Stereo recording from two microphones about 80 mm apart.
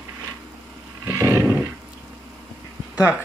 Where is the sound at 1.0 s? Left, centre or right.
Right.